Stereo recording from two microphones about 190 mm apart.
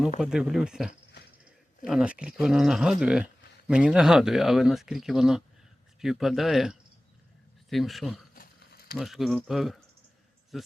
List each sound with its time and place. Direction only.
0.2 s speech: centre (ahead or behind)
8.4 s a sound: 55° left (ahead or behind)
9.0 s speech: centre (ahead or behind)